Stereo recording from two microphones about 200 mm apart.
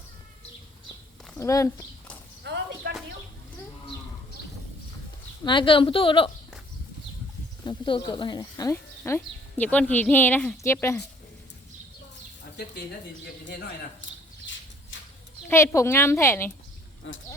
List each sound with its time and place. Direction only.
1.4 s speech: 15° left (ahead or behind)
2.4 s a sound: 55° right (ahead or behind)
5.5 s a woman's voice: 25° left (ahead or behind)
7.6 s speech: 25° left (ahead or behind)
13.4 s a man's voice: 60° left (ahead or behind)
15.4 s speech: 15° left (ahead or behind)